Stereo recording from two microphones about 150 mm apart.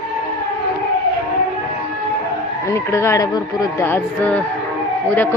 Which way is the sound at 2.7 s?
20° left (ahead or behind).